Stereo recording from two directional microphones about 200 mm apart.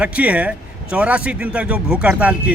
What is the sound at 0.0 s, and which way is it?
A man's voice, 5° right (ahead or behind).